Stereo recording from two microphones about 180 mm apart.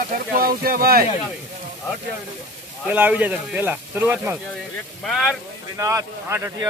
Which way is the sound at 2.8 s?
10° right (ahead or behind).